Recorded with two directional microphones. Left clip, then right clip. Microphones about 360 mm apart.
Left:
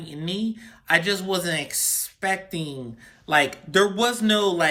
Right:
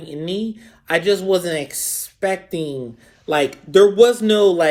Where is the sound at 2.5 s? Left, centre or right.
Left.